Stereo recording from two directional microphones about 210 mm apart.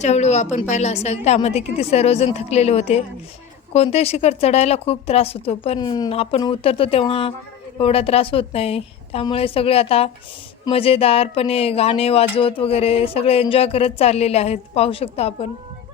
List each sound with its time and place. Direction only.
0.0 s a woman's voice: 30° left (ahead or behind)